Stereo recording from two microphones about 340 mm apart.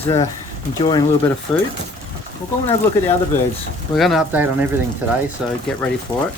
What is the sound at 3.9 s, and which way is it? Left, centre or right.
Speech, centre.